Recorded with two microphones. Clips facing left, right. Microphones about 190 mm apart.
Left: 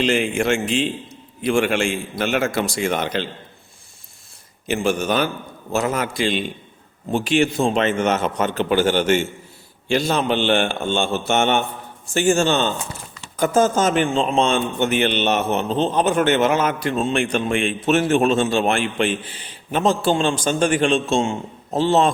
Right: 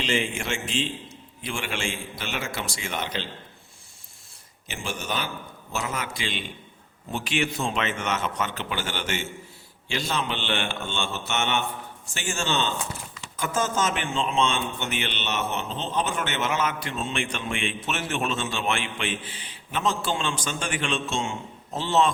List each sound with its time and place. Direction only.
0.0 s a man's voice: 60° left (ahead or behind)
4.7 s a man's voice: 65° left (ahead or behind)
6.1 s a man's voice: 40° left (ahead or behind)
9.0 s a man's voice: 55° left (ahead or behind)
13.3 s a man's voice: 35° left (ahead or behind)
14.8 s a man's voice: 55° left (ahead or behind)
16.8 s a man's voice: 40° left (ahead or behind)
21.2 s a man's voice: 45° left (ahead or behind)